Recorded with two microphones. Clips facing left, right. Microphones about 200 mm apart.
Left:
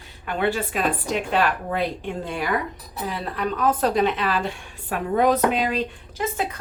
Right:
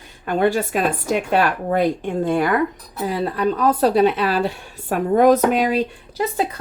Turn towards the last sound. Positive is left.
turn(degrees=-35)  # may be behind; listen again after turning